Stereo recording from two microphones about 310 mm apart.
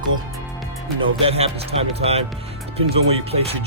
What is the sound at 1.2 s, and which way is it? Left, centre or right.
Speech, centre.